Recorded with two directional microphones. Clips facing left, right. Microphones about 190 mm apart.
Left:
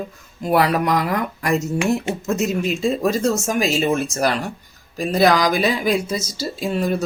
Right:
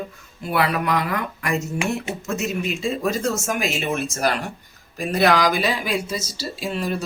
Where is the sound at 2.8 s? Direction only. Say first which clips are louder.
Left 4 dB; 40° left (ahead or behind).